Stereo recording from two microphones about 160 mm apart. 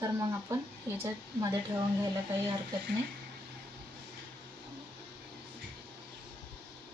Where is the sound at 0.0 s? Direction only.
20° right (ahead or behind).